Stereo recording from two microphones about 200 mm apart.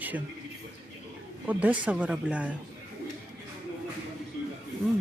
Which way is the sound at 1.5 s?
5° right (ahead or behind).